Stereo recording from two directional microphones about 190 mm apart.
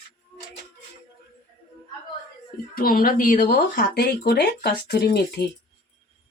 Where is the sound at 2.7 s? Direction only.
50° left (ahead or behind).